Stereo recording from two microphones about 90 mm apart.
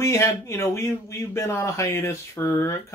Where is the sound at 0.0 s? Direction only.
35° left (ahead or behind).